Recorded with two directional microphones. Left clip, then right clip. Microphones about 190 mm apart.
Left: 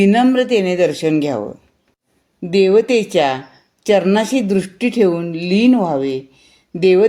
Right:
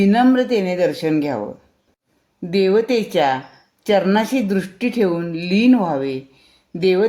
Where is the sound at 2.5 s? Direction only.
30° left (ahead or behind).